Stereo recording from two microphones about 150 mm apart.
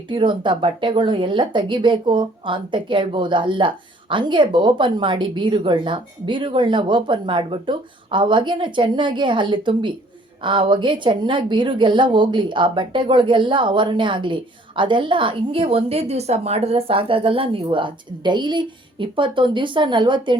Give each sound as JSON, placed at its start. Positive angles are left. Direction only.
{"t": 0.1, "sound": "speech", "side_deg": -30}